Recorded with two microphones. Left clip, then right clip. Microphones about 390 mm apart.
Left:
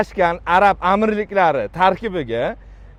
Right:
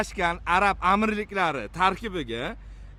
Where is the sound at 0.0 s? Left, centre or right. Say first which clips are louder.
Left 9 dB; centre.